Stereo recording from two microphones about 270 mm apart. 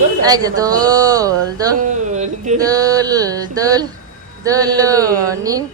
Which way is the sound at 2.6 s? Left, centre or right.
Centre.